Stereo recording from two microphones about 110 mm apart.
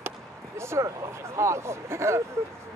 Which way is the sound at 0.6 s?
25° right (ahead or behind).